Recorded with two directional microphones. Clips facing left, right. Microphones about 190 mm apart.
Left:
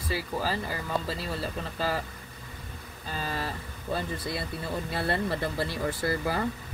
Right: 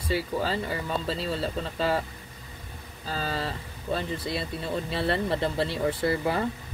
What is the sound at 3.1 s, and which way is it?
Speech, 90° right.